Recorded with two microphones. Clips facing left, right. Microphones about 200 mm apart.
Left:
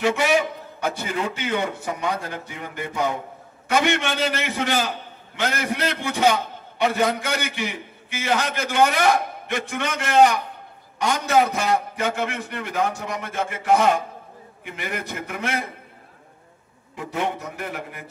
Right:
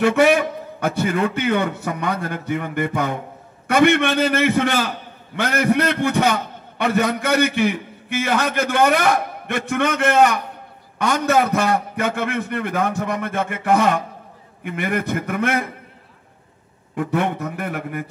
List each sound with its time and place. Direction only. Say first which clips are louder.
0.0 s a man's voice: right 5 dB; 55° right (ahead or behind)
16.9 s a man's voice: right 5 dB; 55° right (ahead or behind)